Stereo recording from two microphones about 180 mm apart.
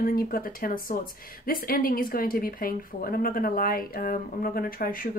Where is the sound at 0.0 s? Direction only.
55° left (ahead or behind).